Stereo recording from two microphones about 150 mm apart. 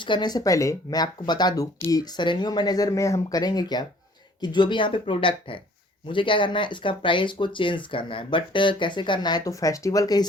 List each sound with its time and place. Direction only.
0.0 s speech: 30° left (ahead or behind)